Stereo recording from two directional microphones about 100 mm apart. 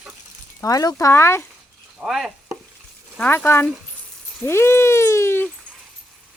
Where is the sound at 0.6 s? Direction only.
35° left (ahead or behind).